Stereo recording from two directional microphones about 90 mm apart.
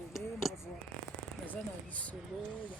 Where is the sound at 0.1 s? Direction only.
Centre (ahead or behind).